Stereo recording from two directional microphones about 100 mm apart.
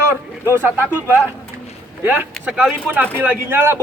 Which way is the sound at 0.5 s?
20° right (ahead or behind).